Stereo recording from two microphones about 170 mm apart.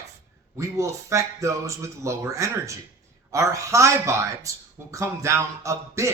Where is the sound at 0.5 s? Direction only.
15° right (ahead or behind).